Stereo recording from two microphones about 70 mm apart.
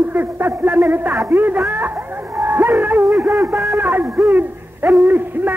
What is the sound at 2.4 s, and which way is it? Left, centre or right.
Music, right.